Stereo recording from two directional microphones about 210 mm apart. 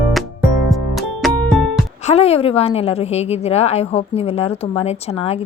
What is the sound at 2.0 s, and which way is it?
A woman's voice, 30° left (ahead or behind).